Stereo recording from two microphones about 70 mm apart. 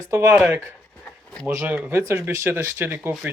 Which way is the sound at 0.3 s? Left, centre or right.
Right.